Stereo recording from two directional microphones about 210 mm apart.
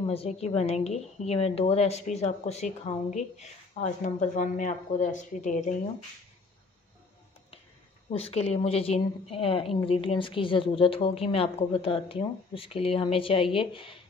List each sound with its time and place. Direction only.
0.0 s a woman's voice: 30° left (ahead or behind)
8.1 s a woman's voice: 30° left (ahead or behind)